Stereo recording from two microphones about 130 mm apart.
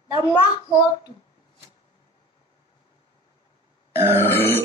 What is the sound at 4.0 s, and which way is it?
Burping, 15° right (ahead or behind).